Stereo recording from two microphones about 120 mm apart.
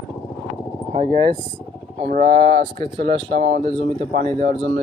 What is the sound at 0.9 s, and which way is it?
Speech, 50° right (ahead or behind).